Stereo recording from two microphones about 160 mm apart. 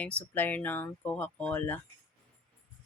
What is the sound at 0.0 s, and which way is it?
Speech, 10° left (ahead or behind).